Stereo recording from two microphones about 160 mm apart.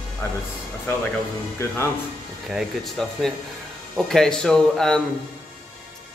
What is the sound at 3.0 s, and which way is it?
A man's voice, centre (ahead or behind).